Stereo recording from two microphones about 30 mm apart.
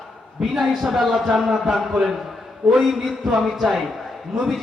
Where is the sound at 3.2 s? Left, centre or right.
Centre.